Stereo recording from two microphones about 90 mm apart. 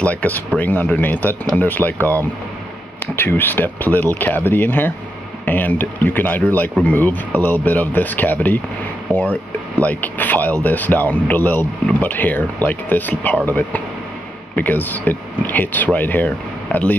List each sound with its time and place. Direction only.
0.0 s speech: 15° left (ahead or behind)
3.2 s speech: 25° left (ahead or behind)